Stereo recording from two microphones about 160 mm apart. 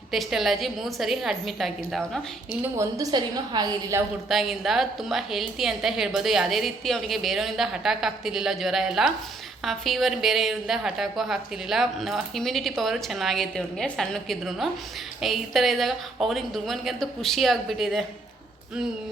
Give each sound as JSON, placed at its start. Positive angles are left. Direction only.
{"t": 0.1, "sound": "a woman's voice", "side_deg": 0}
{"t": 2.7, "sound": "a woman's voice", "side_deg": -25}
{"t": 4.3, "sound": "a woman's voice", "side_deg": 0}